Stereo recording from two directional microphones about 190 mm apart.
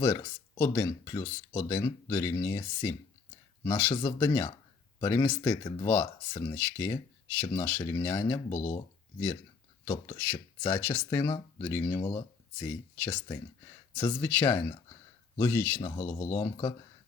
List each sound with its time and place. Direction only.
0.0 s speech: 20° left (ahead or behind)
4.0 s speech: 15° left (ahead or behind)
8.4 s speech: 40° left (ahead or behind)
9.8 s speech: 15° left (ahead or behind)